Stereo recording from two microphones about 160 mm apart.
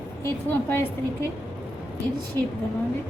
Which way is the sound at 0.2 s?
15° left (ahead or behind).